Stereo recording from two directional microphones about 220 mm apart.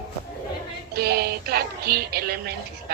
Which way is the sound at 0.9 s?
45° right (ahead or behind).